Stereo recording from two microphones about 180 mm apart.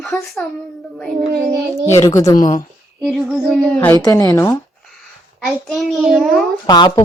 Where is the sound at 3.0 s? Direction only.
5° right (ahead or behind).